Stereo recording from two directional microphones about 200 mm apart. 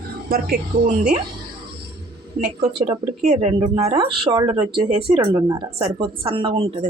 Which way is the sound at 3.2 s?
35° right (ahead or behind).